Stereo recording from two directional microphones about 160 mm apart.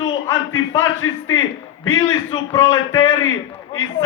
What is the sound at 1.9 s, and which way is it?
A man's voice, 25° left (ahead or behind).